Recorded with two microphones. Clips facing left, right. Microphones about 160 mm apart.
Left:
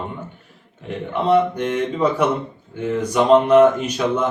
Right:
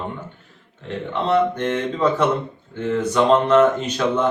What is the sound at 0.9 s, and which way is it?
Speech, 10° left (ahead or behind).